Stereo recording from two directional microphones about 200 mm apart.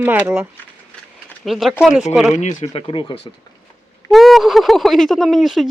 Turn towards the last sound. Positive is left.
turn(degrees=0)  # may be behind; listen again after turning